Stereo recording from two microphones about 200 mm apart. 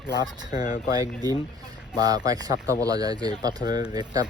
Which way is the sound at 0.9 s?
20° right (ahead or behind).